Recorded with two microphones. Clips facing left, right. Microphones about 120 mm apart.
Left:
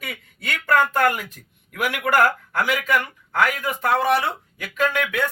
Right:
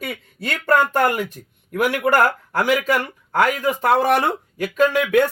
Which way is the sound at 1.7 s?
35° right (ahead or behind).